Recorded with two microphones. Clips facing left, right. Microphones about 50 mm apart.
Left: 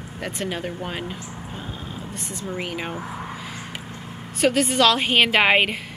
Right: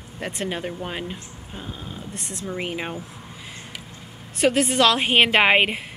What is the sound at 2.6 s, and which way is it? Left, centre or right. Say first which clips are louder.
Speech: right 1 dB; centre.